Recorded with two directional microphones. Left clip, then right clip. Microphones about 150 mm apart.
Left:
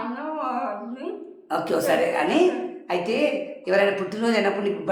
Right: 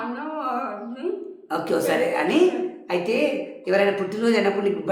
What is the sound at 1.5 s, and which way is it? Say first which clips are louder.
A man's voice: left 1 dB; 15° left (ahead or behind).